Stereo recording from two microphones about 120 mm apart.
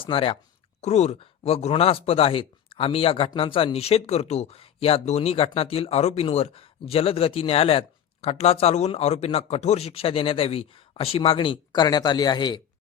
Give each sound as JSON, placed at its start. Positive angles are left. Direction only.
{"t": 0.0, "sound": "speech", "side_deg": 45}
{"t": 0.8, "sound": "speech", "side_deg": 65}